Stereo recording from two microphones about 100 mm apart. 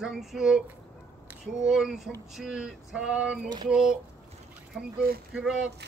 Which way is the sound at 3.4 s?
45° right (ahead or behind).